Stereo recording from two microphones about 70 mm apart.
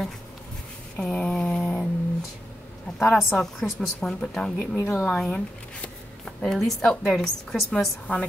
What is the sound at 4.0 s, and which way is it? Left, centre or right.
Speech, centre.